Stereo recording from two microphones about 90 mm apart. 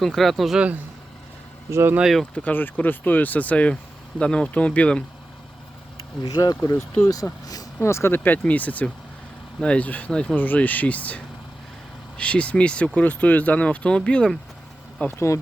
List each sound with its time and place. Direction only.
0.0 s speech: centre (ahead or behind)
1.7 s speech: 25° right (ahead or behind)
2.0 s speech: centre (ahead or behind)
2.3 s speech: 20° left (ahead or behind)
6.2 s speech: 45° left (ahead or behind); by 14.3 s 10° left (ahead or behind)
15.0 s speech: 30° left (ahead or behind)